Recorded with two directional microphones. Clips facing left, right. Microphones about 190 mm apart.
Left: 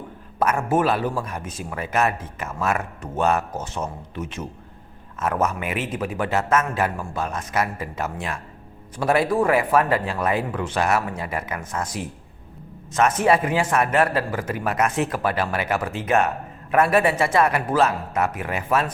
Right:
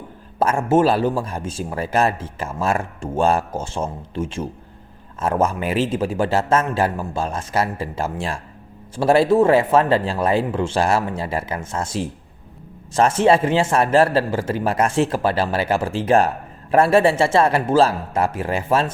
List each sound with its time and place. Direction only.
0.3 s a man's voice: 25° right (ahead or behind)